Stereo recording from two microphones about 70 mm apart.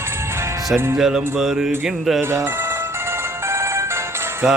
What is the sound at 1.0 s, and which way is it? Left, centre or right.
Music, centre.